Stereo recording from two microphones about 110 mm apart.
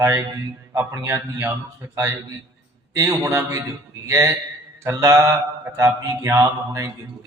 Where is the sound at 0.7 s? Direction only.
25° right (ahead or behind).